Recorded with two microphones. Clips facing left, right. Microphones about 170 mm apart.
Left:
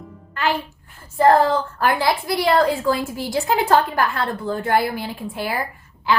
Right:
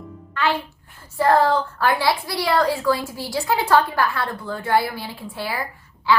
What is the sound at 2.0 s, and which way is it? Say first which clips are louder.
A woman's voice: left 2 dB; 50° left (ahead or behind).